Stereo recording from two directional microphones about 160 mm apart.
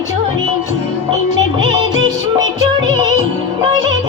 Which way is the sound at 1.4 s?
25° right (ahead or behind).